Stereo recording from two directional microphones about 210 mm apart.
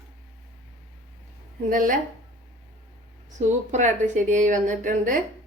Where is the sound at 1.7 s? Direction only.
40° right (ahead or behind).